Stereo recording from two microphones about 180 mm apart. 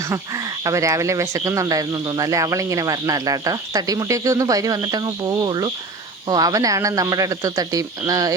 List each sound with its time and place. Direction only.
0.6 s speech: 15° right (ahead or behind)